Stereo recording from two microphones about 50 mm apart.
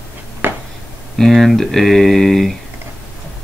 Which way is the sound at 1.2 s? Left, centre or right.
Centre.